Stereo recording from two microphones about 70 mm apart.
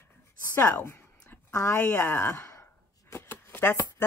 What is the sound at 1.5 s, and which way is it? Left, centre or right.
Speech, left.